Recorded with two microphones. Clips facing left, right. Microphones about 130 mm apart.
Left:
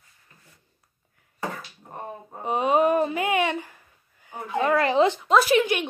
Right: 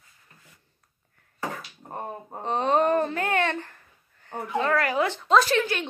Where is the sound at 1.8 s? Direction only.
40° right (ahead or behind).